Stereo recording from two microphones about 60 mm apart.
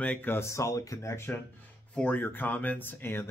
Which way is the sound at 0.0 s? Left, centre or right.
Left.